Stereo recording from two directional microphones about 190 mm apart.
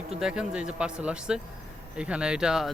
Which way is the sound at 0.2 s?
5° right (ahead or behind).